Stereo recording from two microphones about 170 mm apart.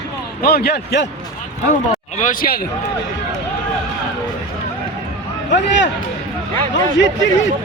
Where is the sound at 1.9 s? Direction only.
45° left (ahead or behind).